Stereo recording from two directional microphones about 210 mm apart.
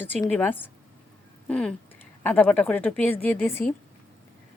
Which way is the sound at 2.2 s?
10° left (ahead or behind).